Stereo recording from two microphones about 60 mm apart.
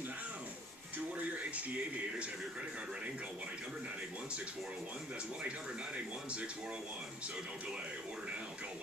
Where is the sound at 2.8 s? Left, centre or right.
Centre.